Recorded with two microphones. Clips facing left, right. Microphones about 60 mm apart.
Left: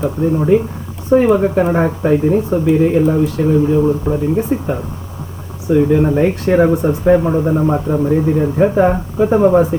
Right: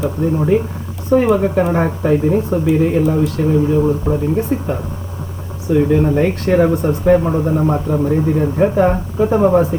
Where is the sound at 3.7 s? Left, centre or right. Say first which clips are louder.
Left 1 dB; centre.